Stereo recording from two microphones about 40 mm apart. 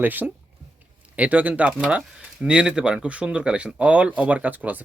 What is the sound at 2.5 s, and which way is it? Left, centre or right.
Speech, right.